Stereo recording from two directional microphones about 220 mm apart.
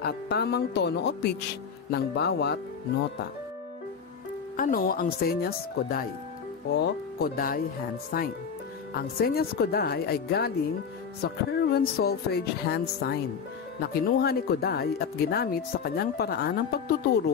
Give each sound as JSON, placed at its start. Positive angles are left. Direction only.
{"t": 0.0, "sound": "speech", "side_deg": 45}
{"t": 4.6, "sound": "speech", "side_deg": 40}
{"t": 7.3, "sound": "speech", "side_deg": 40}